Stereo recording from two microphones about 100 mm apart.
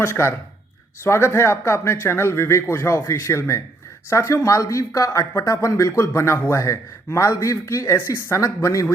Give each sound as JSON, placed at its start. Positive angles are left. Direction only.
{"t": 0.0, "sound": "speech", "side_deg": 25}